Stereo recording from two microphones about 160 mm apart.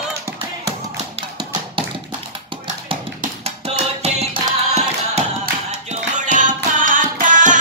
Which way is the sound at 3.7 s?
40° right (ahead or behind).